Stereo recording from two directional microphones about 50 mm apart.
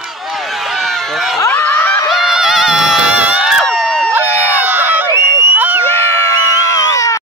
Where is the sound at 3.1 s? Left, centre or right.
Right.